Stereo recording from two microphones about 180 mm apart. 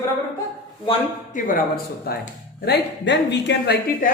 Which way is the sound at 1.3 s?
50° left (ahead or behind).